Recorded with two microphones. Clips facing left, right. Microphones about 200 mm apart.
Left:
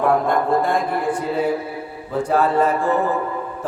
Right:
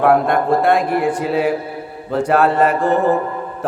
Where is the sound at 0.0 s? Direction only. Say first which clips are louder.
Right 4 dB; 75° right (ahead or behind).